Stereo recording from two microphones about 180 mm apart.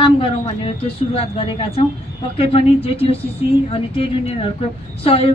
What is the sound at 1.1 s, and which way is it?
A woman's voice, 30° left (ahead or behind).